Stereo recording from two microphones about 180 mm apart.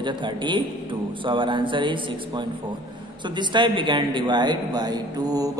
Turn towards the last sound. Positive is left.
turn(degrees=-20)  # may be behind; listen again after turning